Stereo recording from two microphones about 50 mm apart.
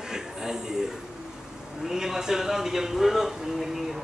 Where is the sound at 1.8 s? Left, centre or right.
Centre.